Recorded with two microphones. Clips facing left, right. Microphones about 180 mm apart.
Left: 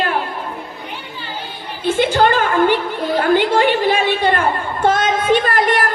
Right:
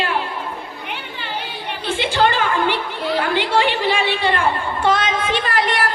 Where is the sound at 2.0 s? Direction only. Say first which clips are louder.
Left 4 dB; 45° left (ahead or behind).